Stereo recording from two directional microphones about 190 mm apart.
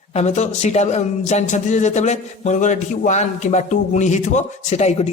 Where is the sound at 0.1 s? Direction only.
35° left (ahead or behind).